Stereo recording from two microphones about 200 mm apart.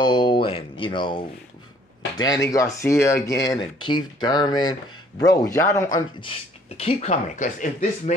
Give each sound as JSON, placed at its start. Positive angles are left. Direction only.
{"t": 0.0, "sound": "a sound", "side_deg": 25}
{"t": 0.7, "sound": "speech", "side_deg": 25}
{"t": 6.8, "sound": "speech", "side_deg": 30}